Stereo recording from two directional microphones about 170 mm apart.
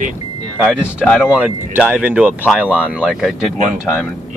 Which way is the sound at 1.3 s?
10° right (ahead or behind).